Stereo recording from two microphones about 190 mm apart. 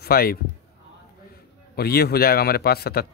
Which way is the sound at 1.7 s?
55° left (ahead or behind).